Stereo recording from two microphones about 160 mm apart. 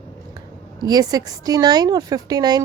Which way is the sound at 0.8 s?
25° right (ahead or behind).